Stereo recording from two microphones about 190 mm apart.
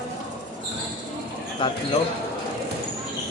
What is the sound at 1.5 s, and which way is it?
Speech, 25° left (ahead or behind).